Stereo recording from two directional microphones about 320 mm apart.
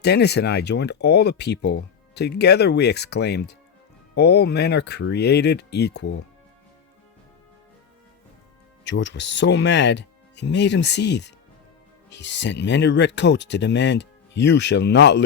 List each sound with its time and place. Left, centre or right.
0.0 s speech: left
8.8 s speech: left